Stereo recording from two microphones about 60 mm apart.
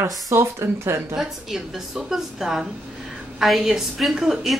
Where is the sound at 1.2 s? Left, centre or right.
Centre.